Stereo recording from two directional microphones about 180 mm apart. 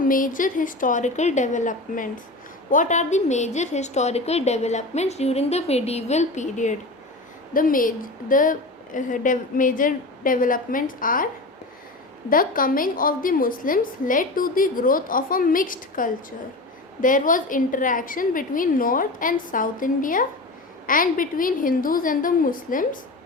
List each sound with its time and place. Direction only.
0.0 s a woman's voice: 50° left (ahead or behind)
12.3 s a woman's voice: 50° left (ahead or behind)